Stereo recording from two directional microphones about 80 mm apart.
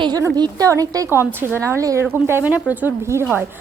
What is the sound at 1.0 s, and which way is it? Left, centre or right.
A woman's voice, right.